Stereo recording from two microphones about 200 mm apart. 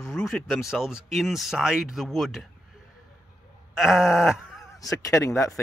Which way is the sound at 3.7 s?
Centre (ahead or behind).